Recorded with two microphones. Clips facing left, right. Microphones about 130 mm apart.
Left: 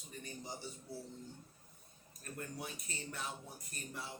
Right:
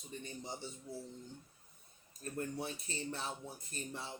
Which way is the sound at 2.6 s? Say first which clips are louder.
Right 5 dB; 30° right (ahead or behind).